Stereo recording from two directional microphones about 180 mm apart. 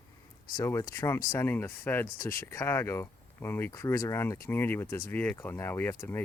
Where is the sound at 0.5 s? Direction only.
15° left (ahead or behind).